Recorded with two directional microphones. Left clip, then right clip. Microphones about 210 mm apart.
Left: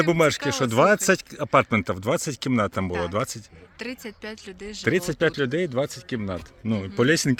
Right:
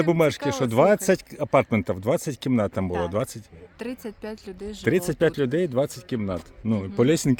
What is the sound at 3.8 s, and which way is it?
Speech, 25° right (ahead or behind).